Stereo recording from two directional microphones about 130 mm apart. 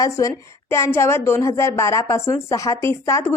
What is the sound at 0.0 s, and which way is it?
Speech, 25° left (ahead or behind).